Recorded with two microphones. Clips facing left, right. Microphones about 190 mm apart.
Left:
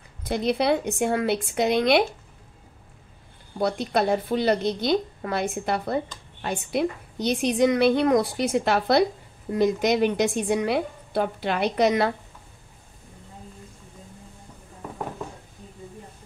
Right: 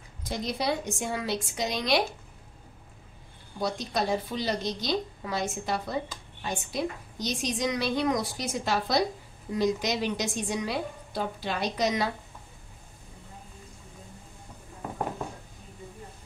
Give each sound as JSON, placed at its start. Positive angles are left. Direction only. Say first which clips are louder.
{"t": 0.2, "sound": "a woman's voice", "louder": "left 8 dB", "side_deg": 60}
{"t": 3.5, "sound": "a woman's voice", "louder": "left 6 dB", "side_deg": 60}